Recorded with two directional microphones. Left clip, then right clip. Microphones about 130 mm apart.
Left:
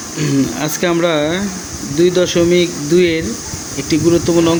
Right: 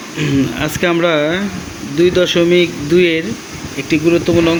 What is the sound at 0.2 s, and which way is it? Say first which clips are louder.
Speech: right 1 dB; 10° left (ahead or behind).